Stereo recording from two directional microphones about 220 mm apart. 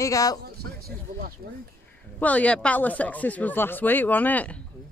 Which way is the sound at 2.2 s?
5° left (ahead or behind).